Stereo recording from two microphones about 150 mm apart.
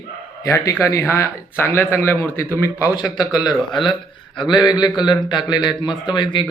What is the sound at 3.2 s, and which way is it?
Speech, 25° left (ahead or behind).